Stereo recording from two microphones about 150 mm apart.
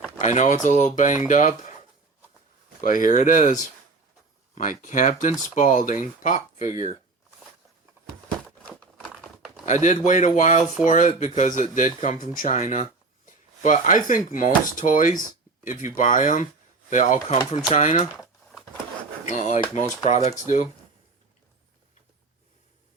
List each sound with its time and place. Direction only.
0.2 s speech: 50° left (ahead or behind)
2.8 s speech: 60° left (ahead or behind)
8.4 s crumpling: 5° left (ahead or behind)
9.8 s speech: 55° left (ahead or behind)
17.5 s speech: 45° left (ahead or behind)
18.2 s a sound: centre (ahead or behind)
19.2 s speech: 50° left (ahead or behind)